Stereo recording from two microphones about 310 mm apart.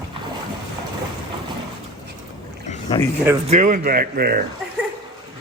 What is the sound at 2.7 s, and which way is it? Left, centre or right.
Boat, left.